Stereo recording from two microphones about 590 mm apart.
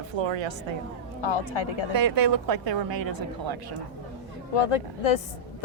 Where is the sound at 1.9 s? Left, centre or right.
Right.